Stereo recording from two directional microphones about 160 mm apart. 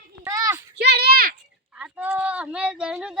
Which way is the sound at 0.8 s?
90° right.